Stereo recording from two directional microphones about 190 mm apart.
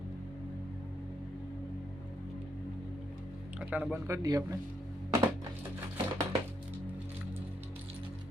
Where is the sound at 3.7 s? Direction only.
10° right (ahead or behind).